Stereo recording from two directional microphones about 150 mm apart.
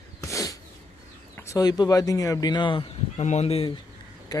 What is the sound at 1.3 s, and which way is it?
Speech, 20° left (ahead or behind).